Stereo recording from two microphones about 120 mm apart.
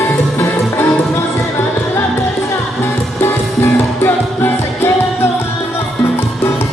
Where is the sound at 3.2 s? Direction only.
20° left (ahead or behind).